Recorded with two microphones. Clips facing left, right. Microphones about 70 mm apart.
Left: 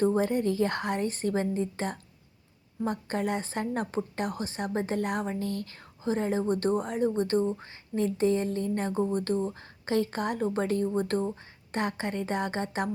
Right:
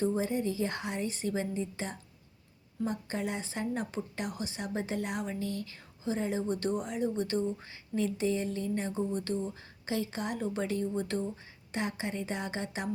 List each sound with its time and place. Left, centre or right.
0.0 s speech: left